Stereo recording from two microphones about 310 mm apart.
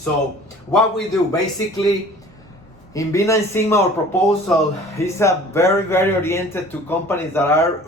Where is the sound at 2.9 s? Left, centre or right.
Centre.